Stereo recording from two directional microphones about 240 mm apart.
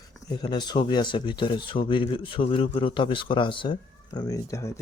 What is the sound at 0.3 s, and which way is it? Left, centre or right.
Speech, centre.